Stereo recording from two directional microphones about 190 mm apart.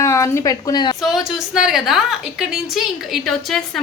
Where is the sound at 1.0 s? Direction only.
Centre (ahead or behind).